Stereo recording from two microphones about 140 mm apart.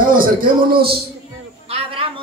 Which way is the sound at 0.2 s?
90° right.